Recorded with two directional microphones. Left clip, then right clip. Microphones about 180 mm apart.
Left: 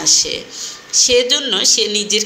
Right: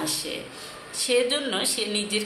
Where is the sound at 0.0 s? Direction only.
25° left (ahead or behind).